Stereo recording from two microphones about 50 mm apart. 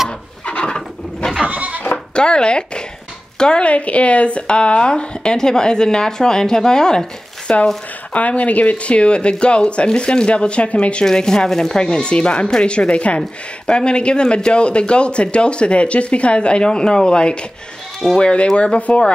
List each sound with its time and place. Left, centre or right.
0.5 s a sound: centre
1.4 s goat: right
2.1 s speech: centre
11.1 s speech: centre